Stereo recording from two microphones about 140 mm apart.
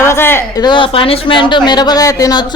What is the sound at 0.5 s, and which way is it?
A woman's voice, 30° left (ahead or behind).